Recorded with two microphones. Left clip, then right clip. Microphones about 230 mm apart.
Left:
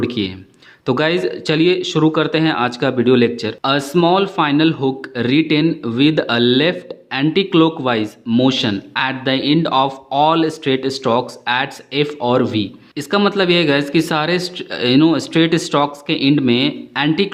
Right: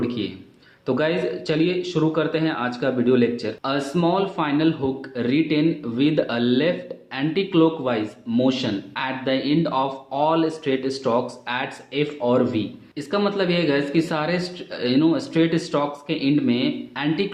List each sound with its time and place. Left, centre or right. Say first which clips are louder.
0.0 s a man's voice: left 6 dB; left